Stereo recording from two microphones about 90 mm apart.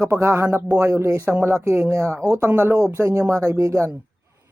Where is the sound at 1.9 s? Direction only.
35° right (ahead or behind).